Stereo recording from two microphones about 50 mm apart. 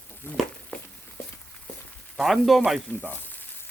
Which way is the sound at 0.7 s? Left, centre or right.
Left.